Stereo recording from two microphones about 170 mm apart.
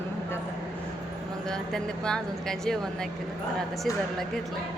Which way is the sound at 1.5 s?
5° left (ahead or behind).